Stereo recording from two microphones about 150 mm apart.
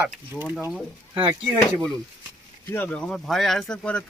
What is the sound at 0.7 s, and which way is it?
Speech, centre (ahead or behind).